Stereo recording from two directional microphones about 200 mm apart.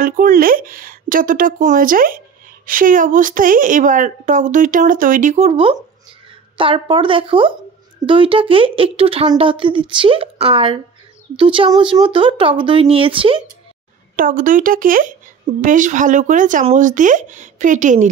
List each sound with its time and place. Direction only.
0.0 s speech: 45° right (ahead or behind); by 13.4 s 25° right (ahead or behind)
14.1 s speech: 40° right (ahead or behind)